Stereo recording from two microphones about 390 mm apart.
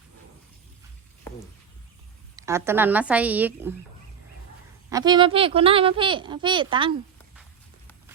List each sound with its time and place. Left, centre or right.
2.3 s speech: centre
4.9 s a child's voice: centre